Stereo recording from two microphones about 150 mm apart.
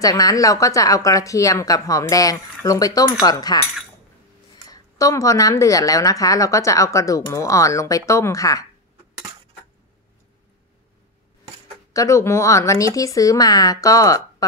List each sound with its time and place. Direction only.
0.0 s speech: 25° left (ahead or behind)
4.6 s speech: 20° left (ahead or behind)
11.9 s speech: 20° left (ahead or behind)